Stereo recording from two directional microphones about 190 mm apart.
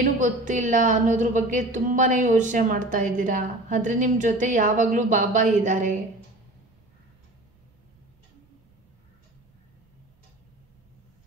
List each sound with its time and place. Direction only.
0.0 s a woman's voice: 40° right (ahead or behind)